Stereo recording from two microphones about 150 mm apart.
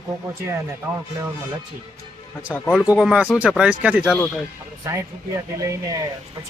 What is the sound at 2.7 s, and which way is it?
Speech, 5° right (ahead or behind).